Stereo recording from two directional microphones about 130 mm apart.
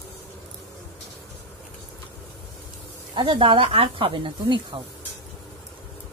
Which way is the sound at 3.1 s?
40° right (ahead or behind).